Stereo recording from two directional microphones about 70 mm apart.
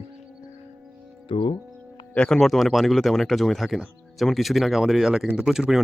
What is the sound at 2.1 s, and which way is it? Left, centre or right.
Speech, centre.